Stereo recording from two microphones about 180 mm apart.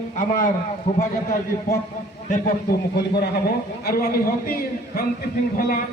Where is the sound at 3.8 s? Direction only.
55° left (ahead or behind).